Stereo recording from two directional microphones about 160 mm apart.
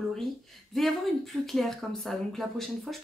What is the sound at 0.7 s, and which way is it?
Speech, centre (ahead or behind).